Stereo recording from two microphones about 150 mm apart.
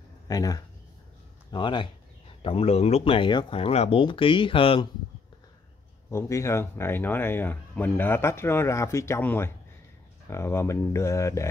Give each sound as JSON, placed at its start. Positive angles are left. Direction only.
{"t": 0.3, "sound": "speech", "side_deg": 25}
{"t": 6.0, "sound": "speech", "side_deg": 20}